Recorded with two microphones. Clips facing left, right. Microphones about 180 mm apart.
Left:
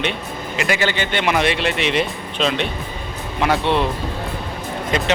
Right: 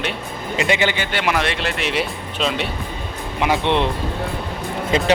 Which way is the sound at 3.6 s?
20° right (ahead or behind).